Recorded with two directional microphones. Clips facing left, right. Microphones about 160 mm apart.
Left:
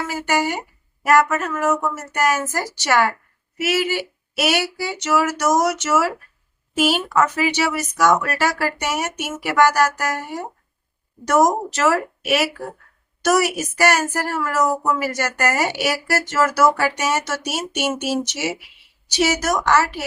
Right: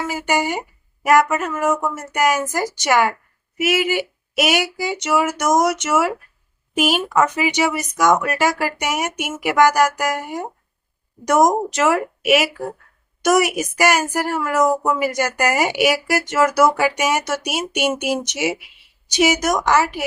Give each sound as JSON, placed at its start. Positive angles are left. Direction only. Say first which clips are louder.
{"t": 0.1, "sound": "speech", "louder": "even", "side_deg": -15}